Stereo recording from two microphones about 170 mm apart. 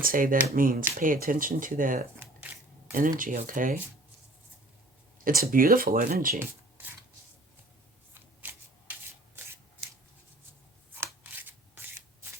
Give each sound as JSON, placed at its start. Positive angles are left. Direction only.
{"t": 0.0, "sound": "speech", "side_deg": -55}
{"t": 2.1, "sound": "shuffling cards", "side_deg": -10}
{"t": 2.9, "sound": "speech", "side_deg": -55}
{"t": 5.2, "sound": "speech", "side_deg": -55}
{"t": 8.4, "sound": "rub", "side_deg": -10}
{"t": 10.9, "sound": "a sound", "side_deg": -10}